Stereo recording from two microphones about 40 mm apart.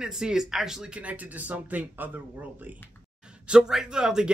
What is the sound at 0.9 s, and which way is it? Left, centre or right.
Speech, right.